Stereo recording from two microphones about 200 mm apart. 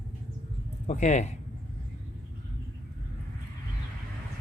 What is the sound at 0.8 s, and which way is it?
Speech, 35° left (ahead or behind).